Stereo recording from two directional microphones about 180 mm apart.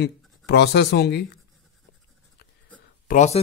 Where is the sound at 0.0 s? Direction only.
65° left (ahead or behind).